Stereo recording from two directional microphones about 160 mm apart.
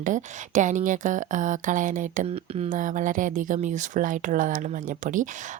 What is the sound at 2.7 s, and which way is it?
Speech, 55° right (ahead or behind).